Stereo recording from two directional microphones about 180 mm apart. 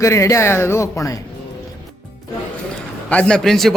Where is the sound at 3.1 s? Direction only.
5° left (ahead or behind).